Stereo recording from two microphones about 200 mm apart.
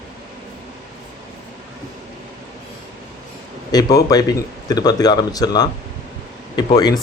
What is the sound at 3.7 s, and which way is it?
A man's voice, 20° left (ahead or behind).